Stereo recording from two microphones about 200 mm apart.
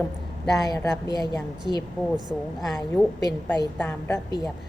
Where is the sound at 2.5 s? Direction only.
Centre (ahead or behind).